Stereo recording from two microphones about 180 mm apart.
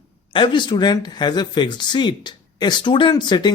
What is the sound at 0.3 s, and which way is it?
Speech, 25° left (ahead or behind).